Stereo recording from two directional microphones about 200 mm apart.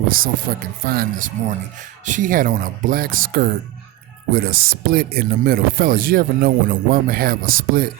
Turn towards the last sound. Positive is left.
turn(degrees=-45)  # may be behind; listen again after turning